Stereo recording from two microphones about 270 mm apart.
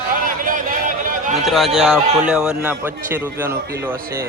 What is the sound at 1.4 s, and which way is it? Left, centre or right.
A man's voice, centre.